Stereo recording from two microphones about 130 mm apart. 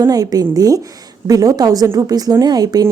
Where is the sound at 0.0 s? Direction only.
30° right (ahead or behind).